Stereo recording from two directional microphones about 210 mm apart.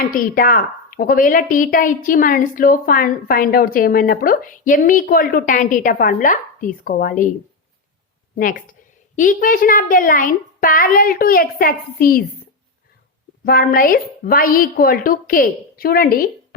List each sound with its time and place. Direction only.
0.0 s a woman's voice: 40° left (ahead or behind)
9.1 s a woman's voice: 40° left (ahead or behind)
13.4 s a woman's voice: 45° left (ahead or behind)